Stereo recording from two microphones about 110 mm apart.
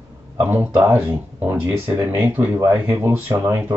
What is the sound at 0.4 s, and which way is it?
Speech, 20° right (ahead or behind).